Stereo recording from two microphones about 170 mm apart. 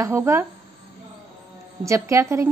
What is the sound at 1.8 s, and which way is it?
Speech, 15° right (ahead or behind).